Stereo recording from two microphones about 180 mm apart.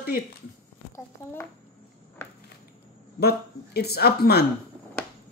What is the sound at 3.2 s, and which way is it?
Speech, 60° left (ahead or behind).